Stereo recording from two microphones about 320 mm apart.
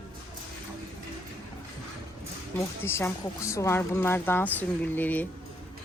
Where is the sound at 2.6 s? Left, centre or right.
Centre.